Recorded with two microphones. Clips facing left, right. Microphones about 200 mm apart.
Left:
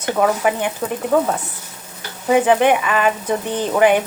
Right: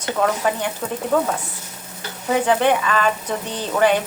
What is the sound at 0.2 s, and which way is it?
Speech, 10° left (ahead or behind).